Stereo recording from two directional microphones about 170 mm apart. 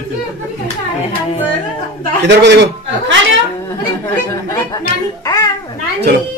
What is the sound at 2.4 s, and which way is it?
Speech, 90° right.